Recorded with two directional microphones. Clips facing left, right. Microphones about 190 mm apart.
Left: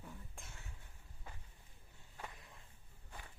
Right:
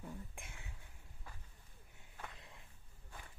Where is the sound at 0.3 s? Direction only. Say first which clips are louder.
Right 2 dB; 15° right (ahead or behind).